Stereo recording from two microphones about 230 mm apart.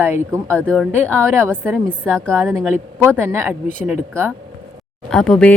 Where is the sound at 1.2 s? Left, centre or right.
Centre.